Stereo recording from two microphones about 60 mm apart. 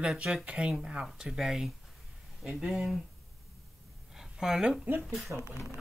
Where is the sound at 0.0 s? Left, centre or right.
Centre.